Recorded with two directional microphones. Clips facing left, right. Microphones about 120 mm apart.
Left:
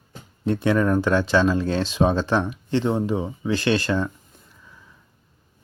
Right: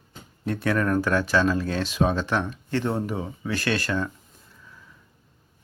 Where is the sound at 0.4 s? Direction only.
25° left (ahead or behind).